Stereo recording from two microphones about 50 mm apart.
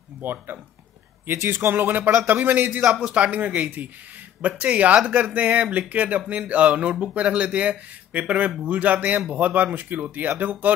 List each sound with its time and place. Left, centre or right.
0.2 s speech: right
2.8 s speech: centre; by 10.7 s right